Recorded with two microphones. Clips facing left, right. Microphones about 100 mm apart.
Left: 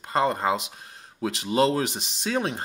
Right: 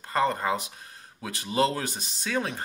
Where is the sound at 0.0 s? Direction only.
25° left (ahead or behind).